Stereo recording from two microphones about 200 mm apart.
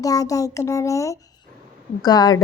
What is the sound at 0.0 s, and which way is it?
Speech, 15° left (ahead or behind).